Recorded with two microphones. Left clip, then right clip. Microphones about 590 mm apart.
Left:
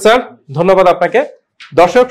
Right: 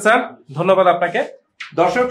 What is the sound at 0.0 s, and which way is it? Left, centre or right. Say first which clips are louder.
Speech: left 5 dB; left.